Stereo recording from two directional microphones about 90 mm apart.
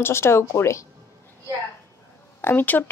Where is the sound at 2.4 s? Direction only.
20° left (ahead or behind).